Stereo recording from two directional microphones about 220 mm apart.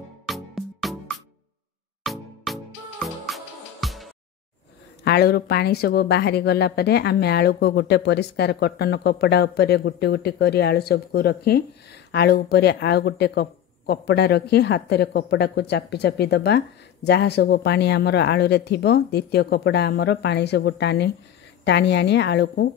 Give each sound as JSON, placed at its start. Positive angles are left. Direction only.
{"t": 0.3, "sound": "music", "side_deg": 0}
{"t": 5.0, "sound": "a woman's voice", "side_deg": 45}